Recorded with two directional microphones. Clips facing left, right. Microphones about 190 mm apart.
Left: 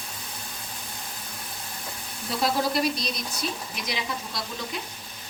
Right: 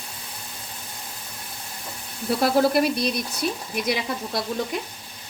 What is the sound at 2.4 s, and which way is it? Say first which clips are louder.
Speech: right 5 dB; 55° right (ahead or behind).